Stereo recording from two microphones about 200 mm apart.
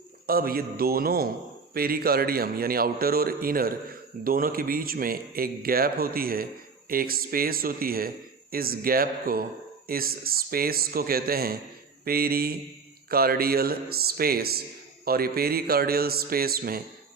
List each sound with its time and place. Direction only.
0.3 s speech: 50° right (ahead or behind)